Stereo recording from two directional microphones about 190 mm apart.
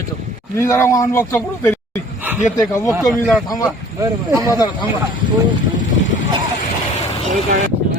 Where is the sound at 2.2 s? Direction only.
5° right (ahead or behind).